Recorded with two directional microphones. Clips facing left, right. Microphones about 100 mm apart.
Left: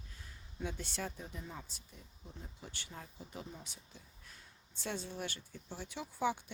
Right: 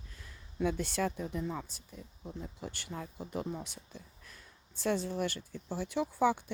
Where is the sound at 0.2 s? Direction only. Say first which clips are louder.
Right 10 dB; 70° right (ahead or behind).